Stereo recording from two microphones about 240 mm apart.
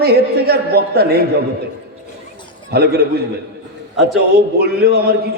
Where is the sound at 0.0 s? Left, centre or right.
Right.